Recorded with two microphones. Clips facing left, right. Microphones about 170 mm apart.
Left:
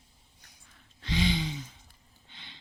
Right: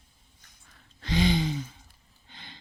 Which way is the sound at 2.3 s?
45° right (ahead or behind).